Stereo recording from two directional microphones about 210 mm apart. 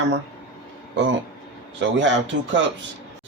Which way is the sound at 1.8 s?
60° right (ahead or behind).